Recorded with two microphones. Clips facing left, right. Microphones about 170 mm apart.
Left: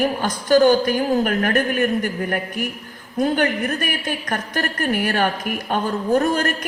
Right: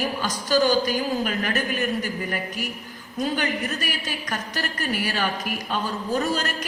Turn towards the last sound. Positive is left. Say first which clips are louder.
# left 6 dB
turn(degrees=60)  # may be behind; listen again after turning